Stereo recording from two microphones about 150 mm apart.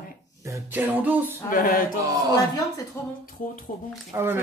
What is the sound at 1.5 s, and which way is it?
Music, 65° left (ahead or behind).